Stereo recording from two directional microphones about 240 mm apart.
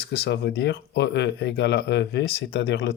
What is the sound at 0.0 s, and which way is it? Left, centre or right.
Speech, left.